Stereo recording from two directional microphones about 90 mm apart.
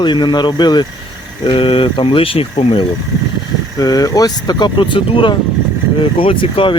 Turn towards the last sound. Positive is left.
turn(degrees=80)